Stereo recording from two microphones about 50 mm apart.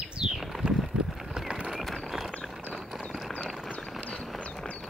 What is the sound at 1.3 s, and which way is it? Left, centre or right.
Horse, centre.